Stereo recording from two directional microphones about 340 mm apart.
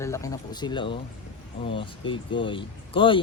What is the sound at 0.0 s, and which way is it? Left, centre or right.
Speech, centre.